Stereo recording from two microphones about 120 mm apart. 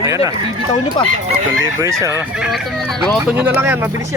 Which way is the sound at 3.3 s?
10° right (ahead or behind).